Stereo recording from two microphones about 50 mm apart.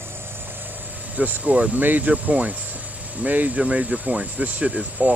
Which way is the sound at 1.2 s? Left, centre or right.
Right.